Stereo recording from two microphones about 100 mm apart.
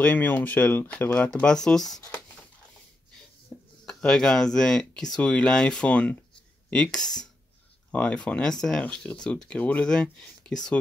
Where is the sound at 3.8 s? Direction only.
10° left (ahead or behind).